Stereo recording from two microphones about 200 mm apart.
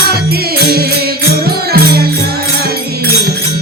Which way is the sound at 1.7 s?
50° right (ahead or behind).